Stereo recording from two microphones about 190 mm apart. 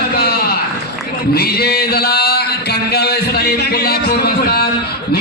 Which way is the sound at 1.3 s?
55° left (ahead or behind).